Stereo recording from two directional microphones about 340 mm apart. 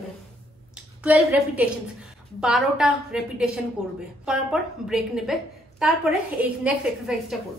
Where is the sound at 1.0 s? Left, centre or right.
Centre.